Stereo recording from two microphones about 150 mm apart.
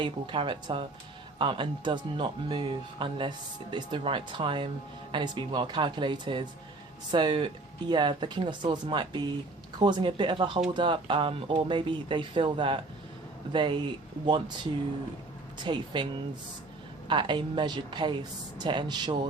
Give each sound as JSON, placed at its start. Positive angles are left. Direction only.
{"t": 0.0, "sound": "speech", "side_deg": -35}
{"t": 17.1, "sound": "speech", "side_deg": -30}